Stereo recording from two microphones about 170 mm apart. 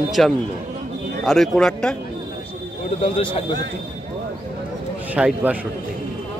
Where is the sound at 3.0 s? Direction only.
35° left (ahead or behind).